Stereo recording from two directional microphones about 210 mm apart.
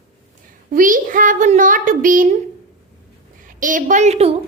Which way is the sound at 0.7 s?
40° right (ahead or behind).